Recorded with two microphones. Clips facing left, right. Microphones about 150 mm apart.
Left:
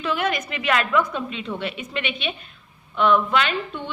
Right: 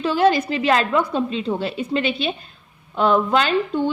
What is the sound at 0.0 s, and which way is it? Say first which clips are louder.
Speech: right 7 dB; 30° right (ahead or behind).